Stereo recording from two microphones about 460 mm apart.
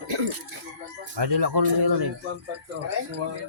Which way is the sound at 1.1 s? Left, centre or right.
Right.